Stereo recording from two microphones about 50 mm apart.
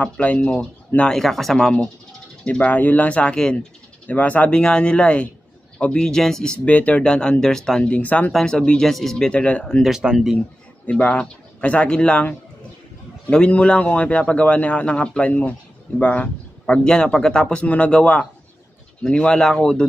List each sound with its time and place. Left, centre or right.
0.0 s a man's voice: left
1.1 s speech: centre
2.6 s speech: left
3.2 s a man's voice: centre
5.9 s speech: centre; by 7.0 s left
7.0 s speech: centre
7.8 s a man's voice: left
8.5 s speech: centre
8.8 s speech: centre
9.3 s a man's voice: left
10.1 s speech: centre
10.9 s a man's voice: left
17.6 s a man's voice: left